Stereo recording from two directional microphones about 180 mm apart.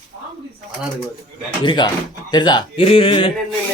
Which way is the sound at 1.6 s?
25° left (ahead or behind).